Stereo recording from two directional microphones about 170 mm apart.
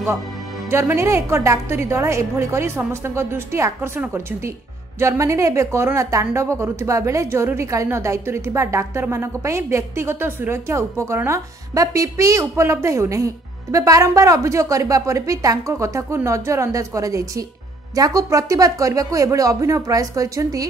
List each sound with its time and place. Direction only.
0.7 s a woman's voice: 15° right (ahead or behind)